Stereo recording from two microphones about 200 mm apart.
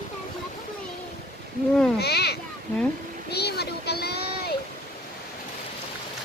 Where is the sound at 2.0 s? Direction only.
55° left (ahead or behind).